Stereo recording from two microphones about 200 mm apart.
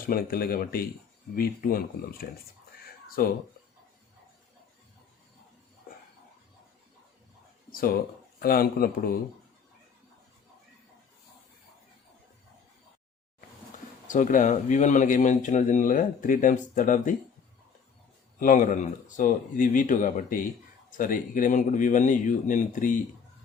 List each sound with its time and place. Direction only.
0.0 s speech: 45° left (ahead or behind)
7.7 s speech: 45° left (ahead or behind)
14.1 s speech: 40° left (ahead or behind)
18.3 s speech: 40° left (ahead or behind)